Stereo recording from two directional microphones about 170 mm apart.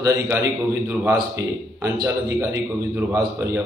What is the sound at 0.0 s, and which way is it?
Speech, 15° right (ahead or behind).